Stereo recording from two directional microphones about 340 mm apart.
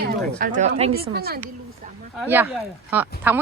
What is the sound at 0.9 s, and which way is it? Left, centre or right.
Speech, right.